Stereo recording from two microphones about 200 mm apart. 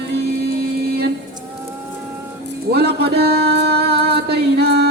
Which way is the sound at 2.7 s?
55° right (ahead or behind).